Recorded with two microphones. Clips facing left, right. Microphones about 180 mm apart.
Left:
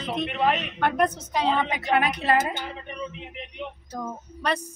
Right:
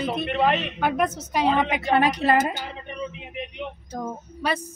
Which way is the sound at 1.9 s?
35° right (ahead or behind).